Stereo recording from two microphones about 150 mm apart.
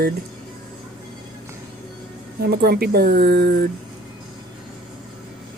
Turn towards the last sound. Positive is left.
turn(degrees=-90)